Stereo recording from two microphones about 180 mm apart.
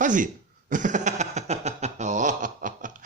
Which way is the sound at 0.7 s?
45° right (ahead or behind).